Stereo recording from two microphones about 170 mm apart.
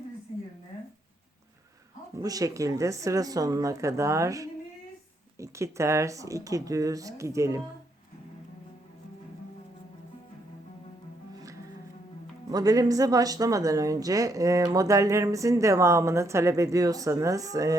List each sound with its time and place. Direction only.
2.1 s speech: 20° right (ahead or behind)
12.5 s speech: 20° right (ahead or behind)